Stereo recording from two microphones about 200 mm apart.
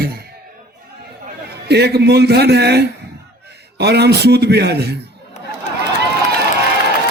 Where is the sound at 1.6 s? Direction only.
55° right (ahead or behind).